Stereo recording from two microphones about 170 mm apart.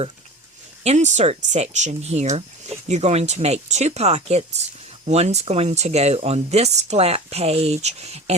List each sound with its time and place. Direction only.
0.9 s speech: 45° right (ahead or behind)